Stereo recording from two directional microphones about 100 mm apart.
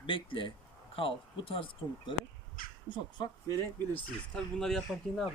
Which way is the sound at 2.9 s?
50° left (ahead or behind).